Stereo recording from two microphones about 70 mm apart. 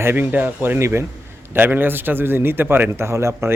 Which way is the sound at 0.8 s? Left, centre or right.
Right.